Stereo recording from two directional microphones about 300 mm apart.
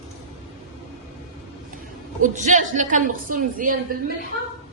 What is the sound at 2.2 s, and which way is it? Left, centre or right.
Speech, right.